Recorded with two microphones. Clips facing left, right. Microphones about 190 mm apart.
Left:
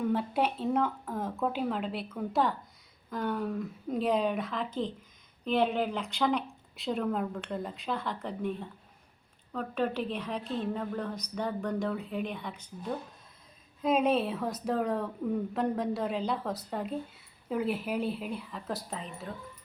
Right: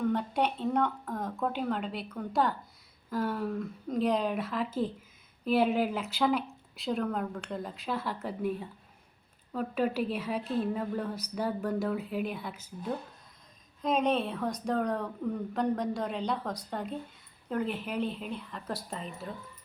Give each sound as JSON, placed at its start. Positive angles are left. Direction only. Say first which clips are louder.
{"t": 0.0, "sound": "a woman's voice", "louder": "even", "side_deg": 5}
{"t": 13.8, "sound": "speech", "louder": "left 2 dB", "side_deg": 5}